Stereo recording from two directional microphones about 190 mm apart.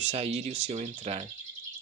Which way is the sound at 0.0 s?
35° right (ahead or behind).